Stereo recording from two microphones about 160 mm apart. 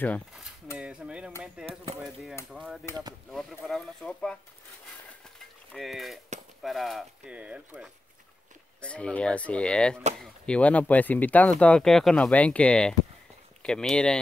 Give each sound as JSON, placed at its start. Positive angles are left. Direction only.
{"t": 0.7, "sound": "mechanisms", "side_deg": -5}
{"t": 1.6, "sound": "speech", "side_deg": -5}
{"t": 5.7, "sound": "speech", "side_deg": 0}
{"t": 8.8, "sound": "speech", "side_deg": 5}